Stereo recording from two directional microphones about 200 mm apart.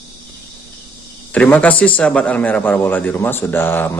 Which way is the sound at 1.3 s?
5° left (ahead or behind).